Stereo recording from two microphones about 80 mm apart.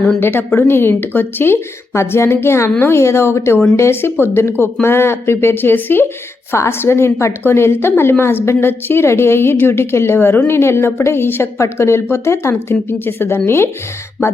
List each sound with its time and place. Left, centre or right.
0.2 s a woman's voice: left